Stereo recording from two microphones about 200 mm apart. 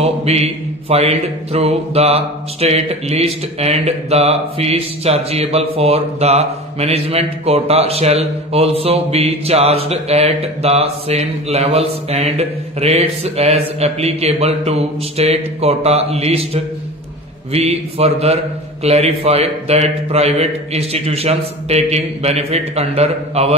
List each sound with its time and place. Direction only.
0.0 s a man's voice: 30° right (ahead or behind)
17.5 s a man's voice: 30° right (ahead or behind)